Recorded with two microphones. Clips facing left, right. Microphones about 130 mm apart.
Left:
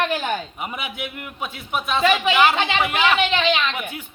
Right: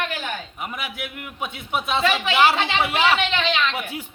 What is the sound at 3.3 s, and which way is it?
Speech, 5° left (ahead or behind).